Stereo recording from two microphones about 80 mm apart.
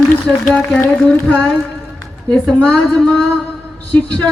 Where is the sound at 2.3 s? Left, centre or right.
Centre.